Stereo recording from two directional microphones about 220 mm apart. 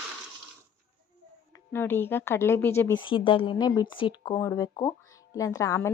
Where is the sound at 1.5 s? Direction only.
10° left (ahead or behind).